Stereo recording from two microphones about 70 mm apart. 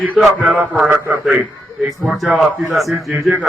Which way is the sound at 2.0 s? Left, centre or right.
Centre.